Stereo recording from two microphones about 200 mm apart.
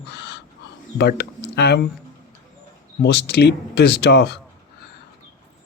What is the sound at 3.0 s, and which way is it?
Speech, 55° left (ahead or behind).